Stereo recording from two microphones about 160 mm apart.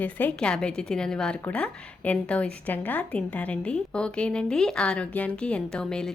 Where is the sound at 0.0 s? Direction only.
10° left (ahead or behind).